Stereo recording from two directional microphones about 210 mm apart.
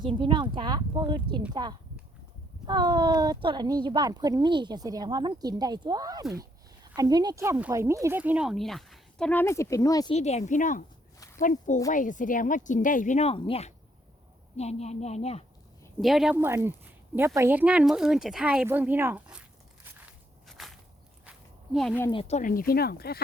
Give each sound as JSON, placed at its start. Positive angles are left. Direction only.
{"t": 0.0, "sound": "speech", "side_deg": -25}
{"t": 10.2, "sound": "speech", "side_deg": 30}
{"t": 16.0, "sound": "speech", "side_deg": 0}
{"t": 21.2, "sound": "a sound", "side_deg": 0}
{"t": 22.1, "sound": "speech", "side_deg": 30}